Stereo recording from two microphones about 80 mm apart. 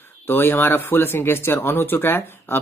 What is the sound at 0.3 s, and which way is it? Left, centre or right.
Speech, left.